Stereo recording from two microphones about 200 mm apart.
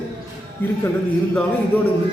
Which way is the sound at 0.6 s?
10° left (ahead or behind).